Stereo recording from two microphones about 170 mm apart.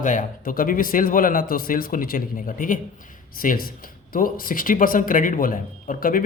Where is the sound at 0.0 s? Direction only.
50° left (ahead or behind).